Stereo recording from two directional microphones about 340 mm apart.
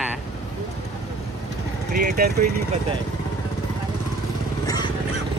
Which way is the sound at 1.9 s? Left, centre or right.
Right.